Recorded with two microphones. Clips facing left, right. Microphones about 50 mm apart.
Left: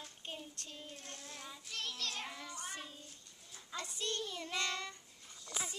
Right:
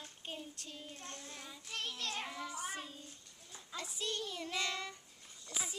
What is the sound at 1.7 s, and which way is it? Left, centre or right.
Child singing, centre.